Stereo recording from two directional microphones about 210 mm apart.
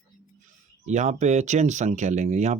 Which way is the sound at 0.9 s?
35° right (ahead or behind).